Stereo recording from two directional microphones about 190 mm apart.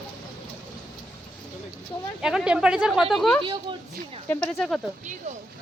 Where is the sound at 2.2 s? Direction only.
5° right (ahead or behind).